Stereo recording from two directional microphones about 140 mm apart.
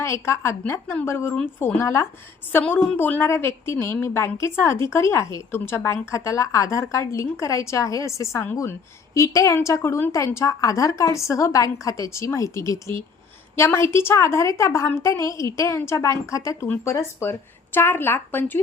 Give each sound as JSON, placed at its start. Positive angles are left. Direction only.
{"t": 0.0, "sound": "a woman's voice", "side_deg": 20}